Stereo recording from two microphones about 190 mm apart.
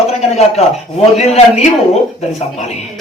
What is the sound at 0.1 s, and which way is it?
A man's voice, 35° left (ahead or behind).